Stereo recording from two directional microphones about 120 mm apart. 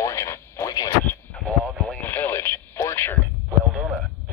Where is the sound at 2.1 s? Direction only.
15° left (ahead or behind).